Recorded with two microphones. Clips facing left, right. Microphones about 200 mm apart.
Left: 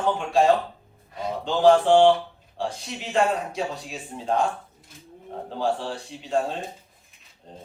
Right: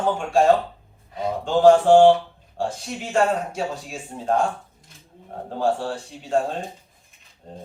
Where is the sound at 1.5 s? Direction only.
45° right (ahead or behind).